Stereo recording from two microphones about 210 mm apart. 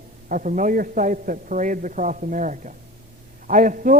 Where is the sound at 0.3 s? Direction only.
40° right (ahead or behind).